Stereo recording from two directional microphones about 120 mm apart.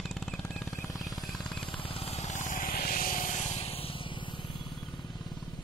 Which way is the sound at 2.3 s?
90° left.